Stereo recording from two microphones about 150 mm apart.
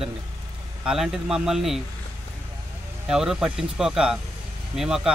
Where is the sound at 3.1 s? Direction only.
5° right (ahead or behind).